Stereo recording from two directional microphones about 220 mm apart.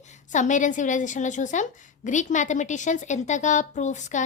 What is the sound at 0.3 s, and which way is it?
A woman's voice, 35° left (ahead or behind).